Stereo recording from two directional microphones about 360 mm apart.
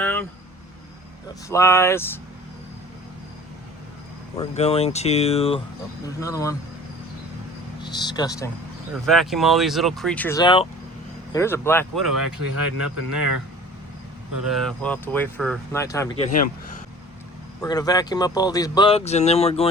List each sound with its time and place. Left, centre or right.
0.0 s vehicle: centre
1.5 s speech: centre
4.4 s speech: centre
7.8 s speech: centre
9.0 s speech: centre
12.5 s speech: right
14.5 s speech: centre
17.6 s speech: centre